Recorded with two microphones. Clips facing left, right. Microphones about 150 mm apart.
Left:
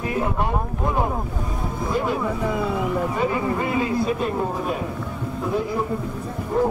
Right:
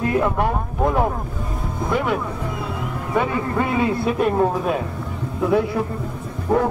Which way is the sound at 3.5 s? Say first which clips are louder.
Right 2 dB; 60° right (ahead or behind).